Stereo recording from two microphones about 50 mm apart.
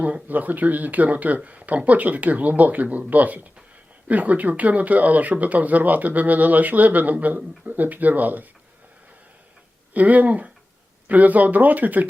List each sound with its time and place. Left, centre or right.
0.0 s speech: right
9.9 s speech: right